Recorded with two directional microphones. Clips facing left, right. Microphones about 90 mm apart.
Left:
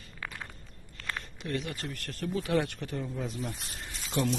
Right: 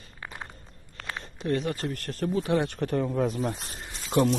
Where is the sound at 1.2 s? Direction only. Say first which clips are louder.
Right 8 dB; 35° right (ahead or behind).